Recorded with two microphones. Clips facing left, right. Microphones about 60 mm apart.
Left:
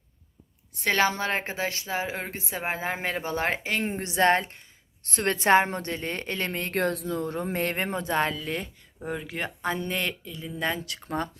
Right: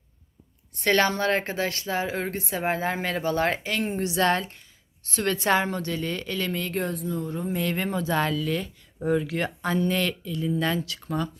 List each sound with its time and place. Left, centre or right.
0.9 s a woman's voice: centre; by 6.7 s left
6.7 s a woman's voice: left
7.5 s a woman's voice: left
9.0 s speech: centre
10.8 s a woman's voice: left